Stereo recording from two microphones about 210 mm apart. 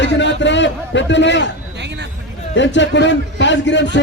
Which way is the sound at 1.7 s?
55° right (ahead or behind).